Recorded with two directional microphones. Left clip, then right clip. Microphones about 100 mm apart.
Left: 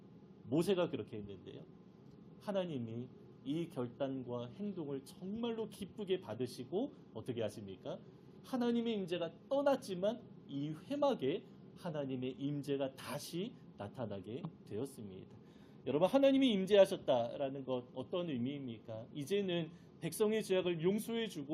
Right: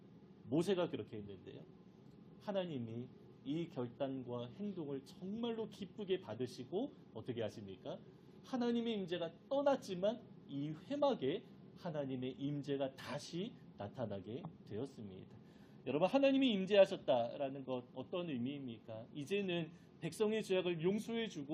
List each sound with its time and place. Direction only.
0.5 s a woman's voice: 25° left (ahead or behind)
2.5 s a woman's voice: 25° left (ahead or behind)